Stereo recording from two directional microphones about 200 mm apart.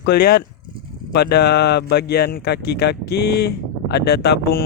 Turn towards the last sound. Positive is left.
turn(degrees=50)  # may be behind; listen again after turning